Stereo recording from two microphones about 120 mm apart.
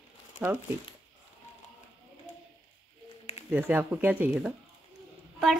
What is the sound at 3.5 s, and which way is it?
Speech, 15° right (ahead or behind).